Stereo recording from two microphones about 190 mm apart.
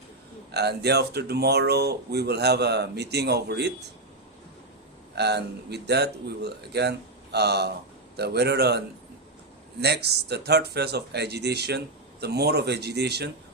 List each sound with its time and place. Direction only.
0.5 s speech: 60° right (ahead or behind)
5.1 s speech: 60° right (ahead or behind)
9.8 s speech: 60° right (ahead or behind)